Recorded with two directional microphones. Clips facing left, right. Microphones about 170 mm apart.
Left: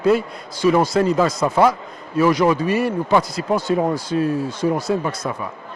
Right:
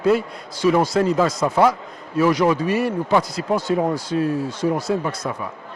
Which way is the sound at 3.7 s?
30° left (ahead or behind).